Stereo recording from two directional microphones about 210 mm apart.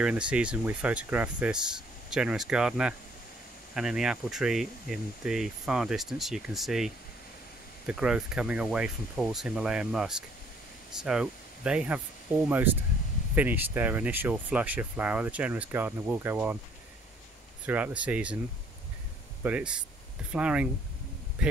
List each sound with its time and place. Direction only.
0.0 s speech: 5° right (ahead or behind)
17.6 s speech: 5° right (ahead or behind)
19.4 s speech: 5° right (ahead or behind)
21.4 s a sound: 5° right (ahead or behind)